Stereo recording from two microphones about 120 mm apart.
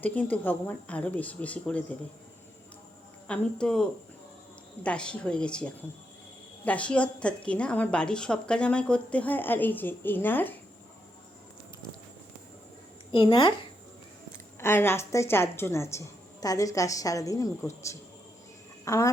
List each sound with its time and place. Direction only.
0.0 s a woman's voice: 15° left (ahead or behind)
3.2 s a woman's voice: 10° left (ahead or behind)
13.1 s speech: 40° left (ahead or behind)
14.6 s a woman's voice: 20° left (ahead or behind)